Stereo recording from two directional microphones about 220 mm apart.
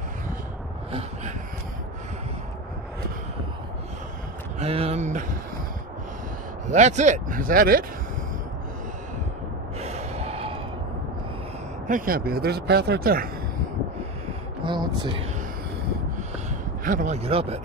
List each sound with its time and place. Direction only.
4.6 s speech: 25° right (ahead or behind)
6.7 s speech: 30° right (ahead or behind)
9.8 s gasp: 30° right (ahead or behind)
11.9 s speech: 40° right (ahead or behind)
14.6 s speech: 20° right (ahead or behind)
16.4 s a sound: 35° right (ahead or behind)